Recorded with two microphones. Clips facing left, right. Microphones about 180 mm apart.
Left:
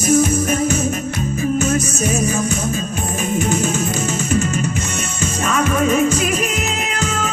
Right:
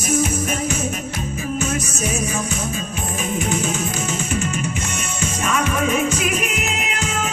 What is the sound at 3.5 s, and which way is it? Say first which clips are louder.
Music: left 4 dB; 45° left (ahead or behind).